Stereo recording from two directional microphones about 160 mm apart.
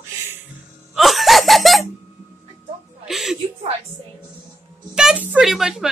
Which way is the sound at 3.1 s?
Centre (ahead or behind).